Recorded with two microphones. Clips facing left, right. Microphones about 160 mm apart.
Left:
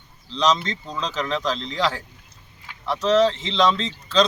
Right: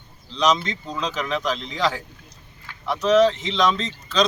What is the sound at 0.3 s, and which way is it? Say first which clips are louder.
Speech: even; 15° right (ahead or behind).